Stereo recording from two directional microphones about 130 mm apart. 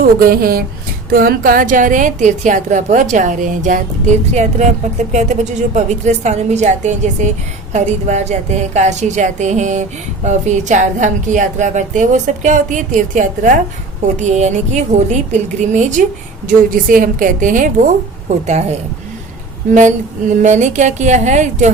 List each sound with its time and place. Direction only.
0.0 s a woman's voice: 90° right
14.2 s a woman's voice: 65° right (ahead or behind)
16.5 s a woman's voice: 90° right
18.3 s a woman's voice: 60° right (ahead or behind)